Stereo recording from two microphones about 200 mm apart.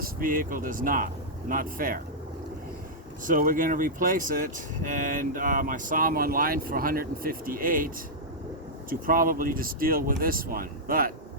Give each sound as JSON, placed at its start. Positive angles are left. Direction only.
{"t": 0.0, "sound": "speech", "side_deg": -45}
{"t": 3.2, "sound": "speech", "side_deg": -45}